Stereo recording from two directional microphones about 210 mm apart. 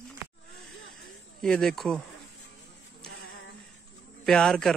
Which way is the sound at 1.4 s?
Centre (ahead or behind).